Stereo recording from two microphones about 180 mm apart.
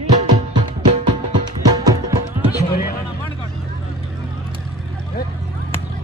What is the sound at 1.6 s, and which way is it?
Music, 20° right (ahead or behind).